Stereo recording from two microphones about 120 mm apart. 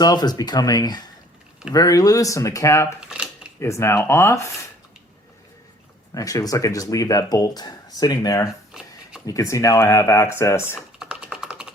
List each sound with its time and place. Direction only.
0.0 s speech: 35° left (ahead or behind)
3.0 s a sound: 10° right (ahead or behind)
3.6 s speech: 20° left (ahead or behind)
6.1 s speech: 30° left (ahead or behind)
8.7 s a sound: 5° right (ahead or behind)
9.2 s speech: 30° left (ahead or behind)
10.8 s typing: 5° right (ahead or behind)